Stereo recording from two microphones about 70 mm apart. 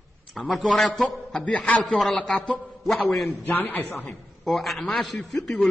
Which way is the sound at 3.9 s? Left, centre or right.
Centre.